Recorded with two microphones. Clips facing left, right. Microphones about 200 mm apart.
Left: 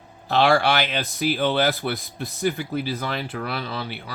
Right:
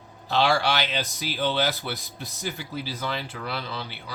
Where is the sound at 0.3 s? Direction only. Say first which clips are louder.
Left 4 dB; 55° left (ahead or behind).